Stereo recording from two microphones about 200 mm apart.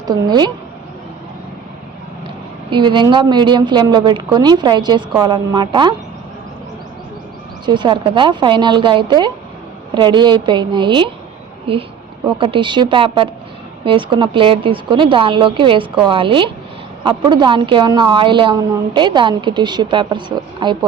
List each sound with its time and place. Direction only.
0.0 s speech: 20° right (ahead or behind)
2.6 s speech: 25° right (ahead or behind)
7.6 s a woman's voice: 25° right (ahead or behind)